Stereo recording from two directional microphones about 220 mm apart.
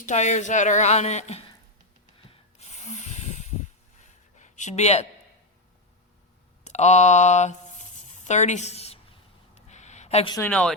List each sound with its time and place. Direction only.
0.0 s speech: 35° left (ahead or behind)
2.3 s snort: 30° left (ahead or behind)
6.7 s a sound: 30° left (ahead or behind)
10.3 s speech: 5° left (ahead or behind)